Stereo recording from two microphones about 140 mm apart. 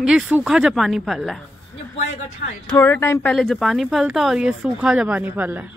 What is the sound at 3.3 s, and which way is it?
Speech, centre (ahead or behind).